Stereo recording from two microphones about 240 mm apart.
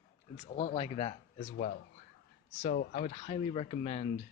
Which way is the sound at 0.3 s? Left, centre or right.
Left.